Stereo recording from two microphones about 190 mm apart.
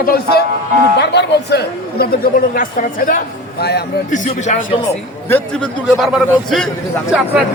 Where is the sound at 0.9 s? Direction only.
65° left (ahead or behind).